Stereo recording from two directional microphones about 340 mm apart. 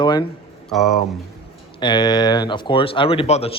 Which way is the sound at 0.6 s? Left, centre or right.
Centre.